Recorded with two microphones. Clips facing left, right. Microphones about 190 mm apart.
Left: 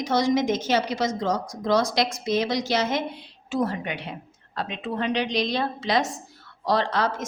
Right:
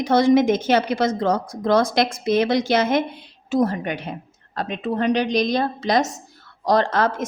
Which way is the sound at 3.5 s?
40° right (ahead or behind).